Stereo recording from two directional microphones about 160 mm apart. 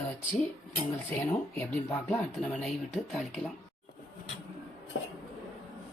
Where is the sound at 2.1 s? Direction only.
Centre (ahead or behind).